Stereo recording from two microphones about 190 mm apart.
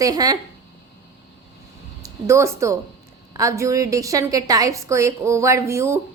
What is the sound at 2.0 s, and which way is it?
A woman's voice, 15° right (ahead or behind).